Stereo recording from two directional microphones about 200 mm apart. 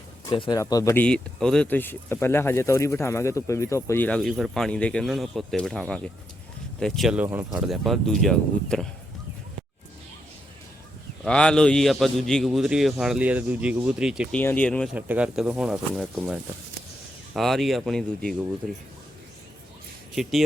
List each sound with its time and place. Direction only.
0.3 s speech: 20° left (ahead or behind)
1.0 s a man's voice: 5° left (ahead or behind)
11.3 s a man's voice: 5° left (ahead or behind)
14.9 s a man's voice: 10° right (ahead or behind)